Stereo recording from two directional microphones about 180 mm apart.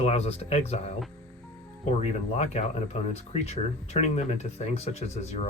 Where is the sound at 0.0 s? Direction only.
35° left (ahead or behind).